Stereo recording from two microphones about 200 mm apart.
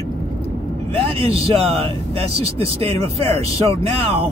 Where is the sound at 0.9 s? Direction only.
30° right (ahead or behind).